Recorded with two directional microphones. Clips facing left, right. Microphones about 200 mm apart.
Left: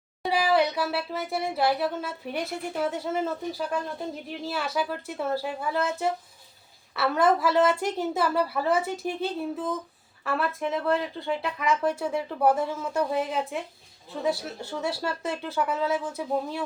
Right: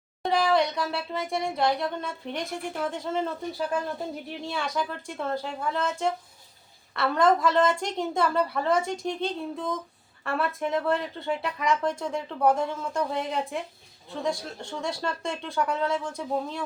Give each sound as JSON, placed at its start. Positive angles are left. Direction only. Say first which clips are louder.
{"t": 0.2, "sound": "speech", "louder": "even", "side_deg": 5}